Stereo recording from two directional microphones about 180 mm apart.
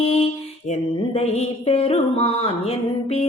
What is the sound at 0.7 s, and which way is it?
Mantra, 35° left (ahead or behind).